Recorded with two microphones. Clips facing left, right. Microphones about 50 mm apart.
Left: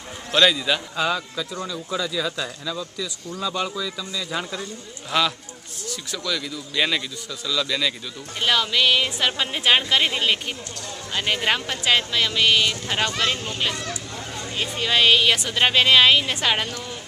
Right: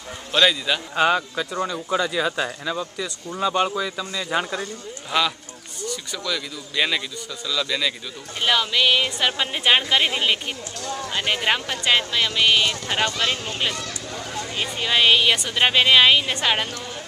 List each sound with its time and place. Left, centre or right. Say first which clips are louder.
0.3 s speech: left 1 dB; centre
0.9 s speech: right 4 dB; right
5.1 s a woman's voice: even; centre